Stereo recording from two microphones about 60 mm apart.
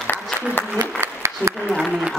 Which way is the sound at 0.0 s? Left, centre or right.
Left.